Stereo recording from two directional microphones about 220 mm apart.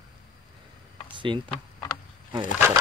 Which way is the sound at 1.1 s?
20° right (ahead or behind).